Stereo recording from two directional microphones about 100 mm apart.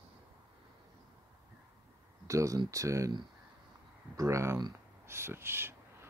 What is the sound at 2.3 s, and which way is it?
Speech, 30° right (ahead or behind).